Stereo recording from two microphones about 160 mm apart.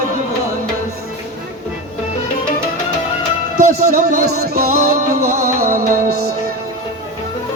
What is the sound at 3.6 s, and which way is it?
Speech, 50° right (ahead or behind).